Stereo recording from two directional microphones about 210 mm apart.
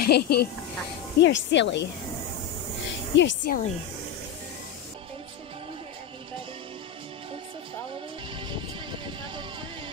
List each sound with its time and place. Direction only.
0.0 s speech: 50° left (ahead or behind)
3.1 s speech: 60° left (ahead or behind)
3.4 s speech: 40° left (ahead or behind)